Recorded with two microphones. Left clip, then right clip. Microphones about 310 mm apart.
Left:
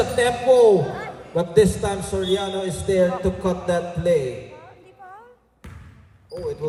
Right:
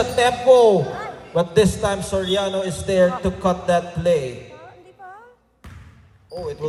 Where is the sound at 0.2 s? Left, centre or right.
Centre.